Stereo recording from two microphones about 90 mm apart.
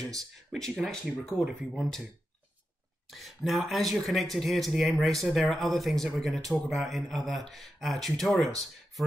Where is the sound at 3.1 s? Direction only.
Centre (ahead or behind).